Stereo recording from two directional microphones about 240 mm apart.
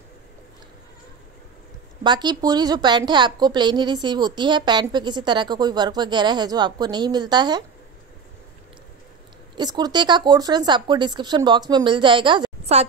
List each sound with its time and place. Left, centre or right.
2.0 s a woman's voice: centre
9.6 s speech: centre